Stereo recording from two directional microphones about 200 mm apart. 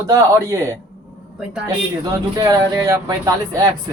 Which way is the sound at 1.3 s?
5° right (ahead or behind).